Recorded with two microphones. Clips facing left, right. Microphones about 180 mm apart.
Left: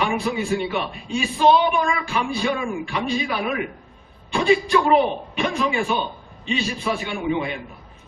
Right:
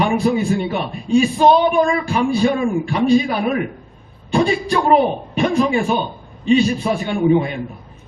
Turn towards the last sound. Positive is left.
turn(degrees=-40)  # may be behind; listen again after turning